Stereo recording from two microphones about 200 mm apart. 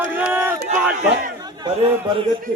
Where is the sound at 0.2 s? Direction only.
10° right (ahead or behind).